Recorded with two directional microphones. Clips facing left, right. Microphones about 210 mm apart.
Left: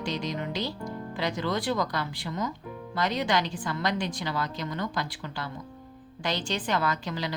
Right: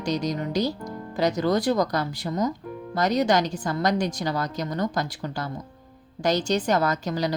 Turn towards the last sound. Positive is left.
turn(degrees=-40)  # may be behind; listen again after turning